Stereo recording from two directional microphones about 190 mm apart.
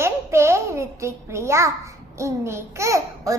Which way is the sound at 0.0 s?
15° right (ahead or behind).